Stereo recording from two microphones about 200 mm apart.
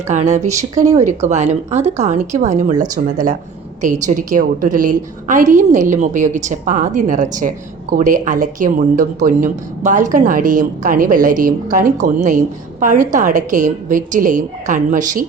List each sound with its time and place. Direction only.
0.1 s a woman's voice: 35° right (ahead or behind)